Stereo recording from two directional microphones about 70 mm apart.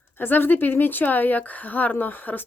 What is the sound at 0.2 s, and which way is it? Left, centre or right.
A woman's voice, left.